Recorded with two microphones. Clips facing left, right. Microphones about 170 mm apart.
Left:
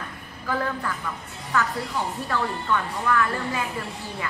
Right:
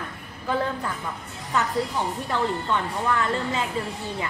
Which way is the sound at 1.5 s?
20° right (ahead or behind).